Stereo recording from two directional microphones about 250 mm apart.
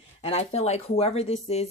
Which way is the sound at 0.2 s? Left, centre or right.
Left.